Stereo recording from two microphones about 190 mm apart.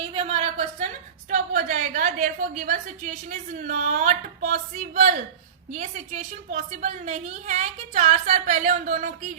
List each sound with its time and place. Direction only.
0.0 s a woman's voice: 30° right (ahead or behind)
1.3 s a woman's voice: 45° right (ahead or behind)